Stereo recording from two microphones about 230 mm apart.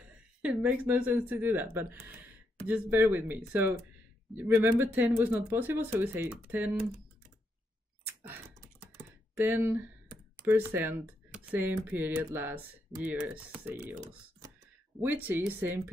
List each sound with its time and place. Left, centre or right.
0.0 s speech: centre
8.9 s computer keyboard: centre
10.4 s speech: centre